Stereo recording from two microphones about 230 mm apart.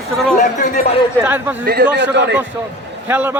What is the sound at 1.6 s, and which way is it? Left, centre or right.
Speech, right.